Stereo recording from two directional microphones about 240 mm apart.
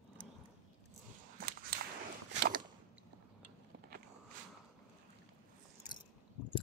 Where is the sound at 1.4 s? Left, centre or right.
Right.